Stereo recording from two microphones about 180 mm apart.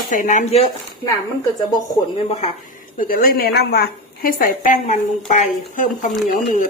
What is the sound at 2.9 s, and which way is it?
Speech, 50° left (ahead or behind).